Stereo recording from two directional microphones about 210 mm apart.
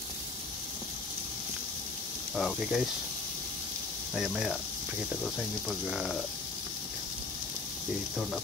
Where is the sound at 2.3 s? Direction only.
Centre (ahead or behind).